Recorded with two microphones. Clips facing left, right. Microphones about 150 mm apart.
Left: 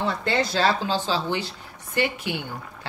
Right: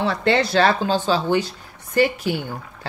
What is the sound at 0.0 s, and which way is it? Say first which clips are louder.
A woman's voice: right 5 dB; 80° right.